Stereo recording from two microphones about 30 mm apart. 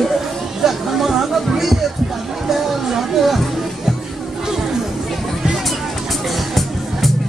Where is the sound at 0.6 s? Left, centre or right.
Centre.